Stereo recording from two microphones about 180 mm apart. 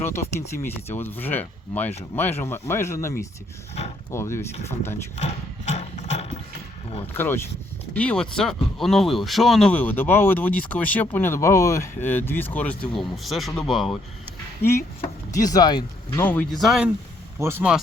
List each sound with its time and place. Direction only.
0.0 s speech: 15° left (ahead or behind)
5.1 s horse: 40° left (ahead or behind)
7.1 s speech: 10° left (ahead or behind)
15.4 s speech: 20° left (ahead or behind); by 17.7 s 10° right (ahead or behind)